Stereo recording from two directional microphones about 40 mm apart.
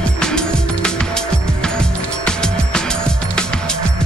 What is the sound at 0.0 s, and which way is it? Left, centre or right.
Music, centre.